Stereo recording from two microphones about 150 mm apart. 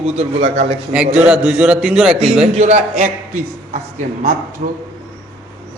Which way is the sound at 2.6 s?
50° right (ahead or behind).